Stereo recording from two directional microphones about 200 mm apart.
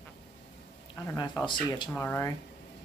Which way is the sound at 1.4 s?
20° left (ahead or behind).